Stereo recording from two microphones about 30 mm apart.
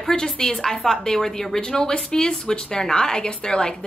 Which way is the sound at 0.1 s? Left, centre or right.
Left.